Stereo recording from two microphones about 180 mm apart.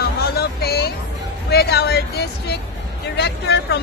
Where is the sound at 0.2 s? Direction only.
60° left (ahead or behind).